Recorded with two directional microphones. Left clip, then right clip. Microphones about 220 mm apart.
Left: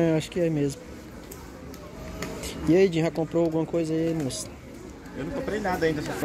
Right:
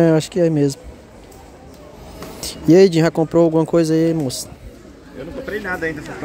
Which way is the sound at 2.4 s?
35° right (ahead or behind).